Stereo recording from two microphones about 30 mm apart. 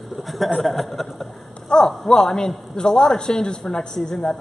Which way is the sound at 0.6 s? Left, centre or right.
Centre.